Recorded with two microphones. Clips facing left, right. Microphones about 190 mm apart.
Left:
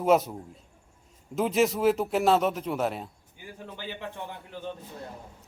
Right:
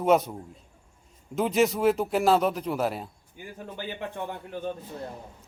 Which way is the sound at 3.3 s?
50° right (ahead or behind).